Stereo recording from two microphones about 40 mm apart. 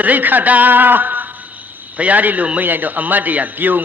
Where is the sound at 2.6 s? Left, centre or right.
Right.